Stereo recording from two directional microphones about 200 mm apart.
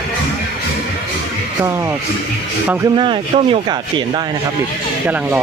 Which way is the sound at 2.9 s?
25° right (ahead or behind).